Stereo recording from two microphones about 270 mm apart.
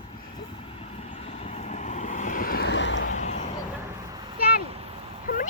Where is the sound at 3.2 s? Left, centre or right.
Left.